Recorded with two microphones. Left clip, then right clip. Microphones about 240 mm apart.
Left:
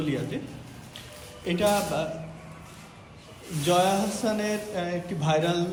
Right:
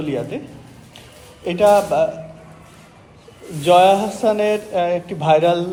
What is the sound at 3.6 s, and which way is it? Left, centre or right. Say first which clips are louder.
Speech: right 11 dB; right.